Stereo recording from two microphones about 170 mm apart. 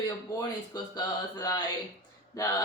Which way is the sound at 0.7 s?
20° left (ahead or behind).